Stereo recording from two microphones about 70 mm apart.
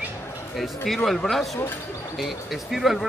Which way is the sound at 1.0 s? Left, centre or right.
Centre.